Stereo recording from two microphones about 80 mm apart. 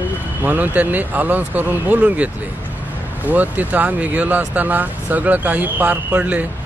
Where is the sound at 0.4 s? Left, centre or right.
Right.